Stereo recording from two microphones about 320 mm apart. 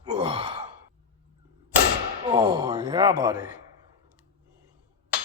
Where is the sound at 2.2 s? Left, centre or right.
Centre.